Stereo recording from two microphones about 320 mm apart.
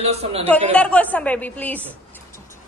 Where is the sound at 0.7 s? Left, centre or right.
Centre.